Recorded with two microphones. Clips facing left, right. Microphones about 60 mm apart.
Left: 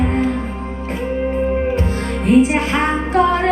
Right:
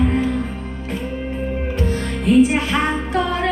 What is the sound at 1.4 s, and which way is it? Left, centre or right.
Music, left.